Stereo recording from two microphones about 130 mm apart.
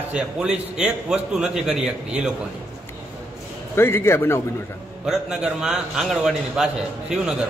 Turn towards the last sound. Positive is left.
turn(degrees=-5)  # may be behind; listen again after turning